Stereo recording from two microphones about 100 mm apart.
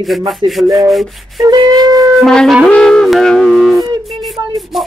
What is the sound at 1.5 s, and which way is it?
Rub, 40° right (ahead or behind).